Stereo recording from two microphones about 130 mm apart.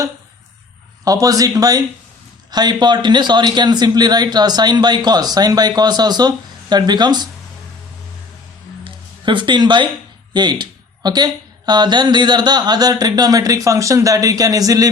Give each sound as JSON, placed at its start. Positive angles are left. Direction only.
{"t": 1.0, "sound": "speech", "side_deg": -25}
{"t": 8.8, "sound": "music", "side_deg": -40}
{"t": 10.3, "sound": "speech", "side_deg": -35}